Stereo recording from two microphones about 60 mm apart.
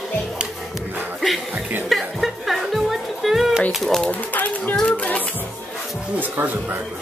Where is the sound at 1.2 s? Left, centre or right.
Centre.